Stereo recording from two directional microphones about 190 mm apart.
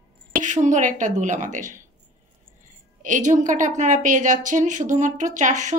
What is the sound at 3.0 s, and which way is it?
A woman's voice, 40° right (ahead or behind).